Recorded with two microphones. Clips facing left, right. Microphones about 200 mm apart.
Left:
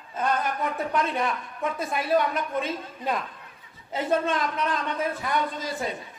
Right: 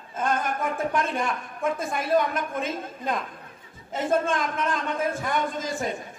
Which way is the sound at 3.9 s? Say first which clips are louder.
Right 1 dB; 50° right (ahead or behind).